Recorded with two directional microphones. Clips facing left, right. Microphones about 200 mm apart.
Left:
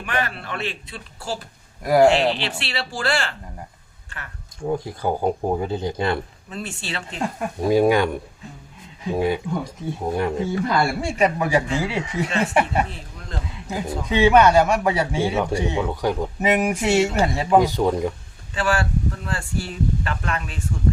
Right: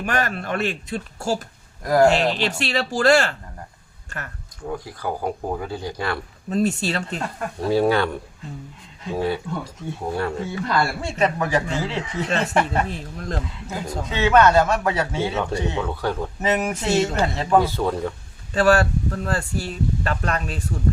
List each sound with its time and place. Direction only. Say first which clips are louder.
0.0 s speech: right 3 dB; 45° right (ahead or behind)
1.8 s a man's voice: left 1 dB; 10° left (ahead or behind)
2.0 s speech: left 1 dB; 40° right (ahead or behind)
4.6 s speech: left 5 dB; 25° left (ahead or behind)
6.5 s speech: right 10 dB; 40° right (ahead or behind)
7.2 s a man's voice: left 3 dB; 10° left (ahead or behind)
18.5 s speech: right 5 dB; 40° right (ahead or behind)